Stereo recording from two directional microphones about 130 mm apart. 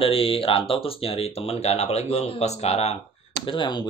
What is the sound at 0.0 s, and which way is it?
Speech, 45° left (ahead or behind).